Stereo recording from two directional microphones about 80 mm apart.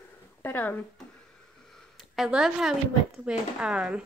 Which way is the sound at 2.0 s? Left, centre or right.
Centre.